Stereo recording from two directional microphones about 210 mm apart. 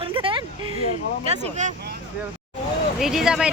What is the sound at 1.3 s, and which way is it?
Speech, 35° right (ahead or behind).